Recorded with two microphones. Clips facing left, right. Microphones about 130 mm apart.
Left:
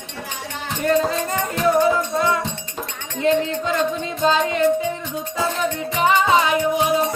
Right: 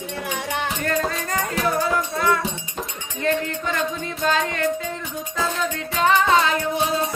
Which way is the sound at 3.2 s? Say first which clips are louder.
Left 4 dB; 15° left (ahead or behind).